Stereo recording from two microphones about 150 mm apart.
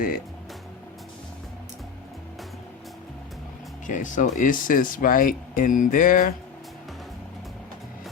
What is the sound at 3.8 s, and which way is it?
Speech, 60° left (ahead or behind).